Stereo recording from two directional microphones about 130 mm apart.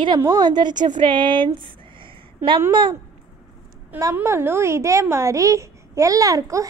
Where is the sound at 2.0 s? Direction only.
40° right (ahead or behind).